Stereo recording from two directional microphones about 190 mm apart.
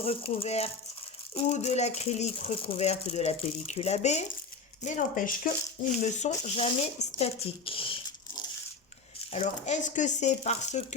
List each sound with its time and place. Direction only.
0.0 s speech: 30° left (ahead or behind)
9.3 s speech: 35° left (ahead or behind)